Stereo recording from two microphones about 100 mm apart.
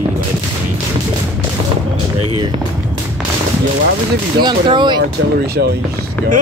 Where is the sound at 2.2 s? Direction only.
65° right (ahead or behind).